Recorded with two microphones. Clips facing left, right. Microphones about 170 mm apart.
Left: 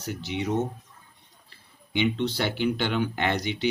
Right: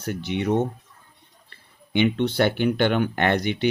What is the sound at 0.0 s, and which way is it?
Speech, 55° right (ahead or behind).